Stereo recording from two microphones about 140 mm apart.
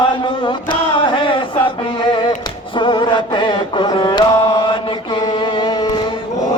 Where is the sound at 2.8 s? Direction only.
35° left (ahead or behind).